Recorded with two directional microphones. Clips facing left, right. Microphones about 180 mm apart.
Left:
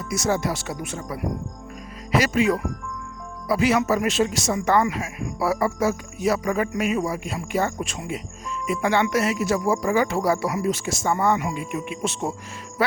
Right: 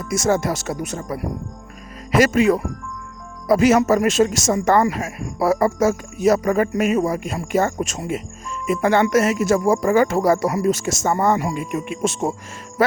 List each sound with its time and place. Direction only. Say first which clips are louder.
0.1 s speech: right 4 dB; 50° right (ahead or behind)